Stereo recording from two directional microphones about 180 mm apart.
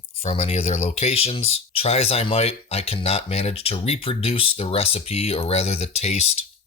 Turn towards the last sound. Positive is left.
turn(degrees=35)  # may be behind; listen again after turning